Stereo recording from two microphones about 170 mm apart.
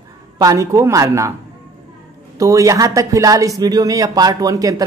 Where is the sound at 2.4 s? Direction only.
20° right (ahead or behind).